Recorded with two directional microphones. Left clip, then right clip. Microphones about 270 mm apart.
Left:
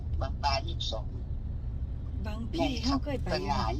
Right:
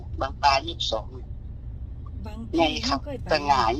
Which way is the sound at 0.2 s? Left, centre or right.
Right.